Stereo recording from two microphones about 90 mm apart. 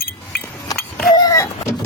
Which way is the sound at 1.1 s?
45° left (ahead or behind).